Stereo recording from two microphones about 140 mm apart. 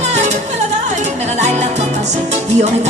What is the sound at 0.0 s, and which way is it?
Music, 55° right (ahead or behind).